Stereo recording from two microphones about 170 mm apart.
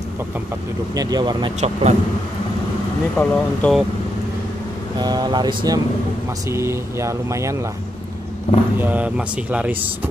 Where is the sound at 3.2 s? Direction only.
15° left (ahead or behind).